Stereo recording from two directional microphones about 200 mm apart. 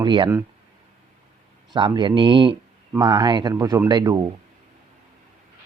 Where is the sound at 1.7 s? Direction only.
20° right (ahead or behind).